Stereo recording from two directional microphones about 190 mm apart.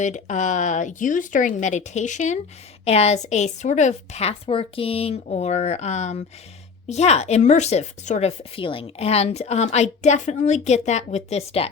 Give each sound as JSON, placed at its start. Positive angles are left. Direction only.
{"t": 0.0, "sound": "speech", "side_deg": 40}